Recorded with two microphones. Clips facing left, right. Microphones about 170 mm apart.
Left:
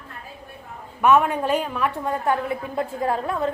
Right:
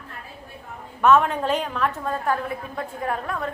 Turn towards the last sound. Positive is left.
turn(degrees=30)  # may be behind; listen again after turning